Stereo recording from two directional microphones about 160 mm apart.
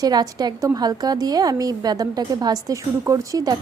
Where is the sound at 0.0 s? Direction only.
25° right (ahead or behind).